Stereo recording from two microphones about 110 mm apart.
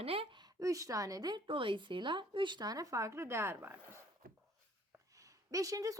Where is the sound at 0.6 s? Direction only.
30° right (ahead or behind).